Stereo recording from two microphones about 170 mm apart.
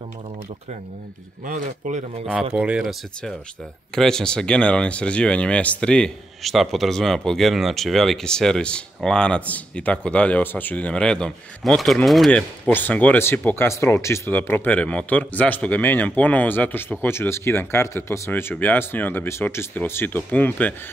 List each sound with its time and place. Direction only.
1.4 s a man's voice: 50° right (ahead or behind)
2.5 s speech: 5° right (ahead or behind); by 20.7 s 10° left (ahead or behind)